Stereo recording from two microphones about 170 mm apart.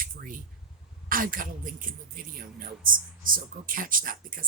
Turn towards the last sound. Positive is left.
turn(degrees=-55)  # may be behind; listen again after turning